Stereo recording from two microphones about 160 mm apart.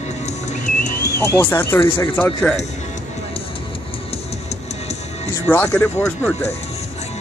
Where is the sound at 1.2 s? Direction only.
15° left (ahead or behind).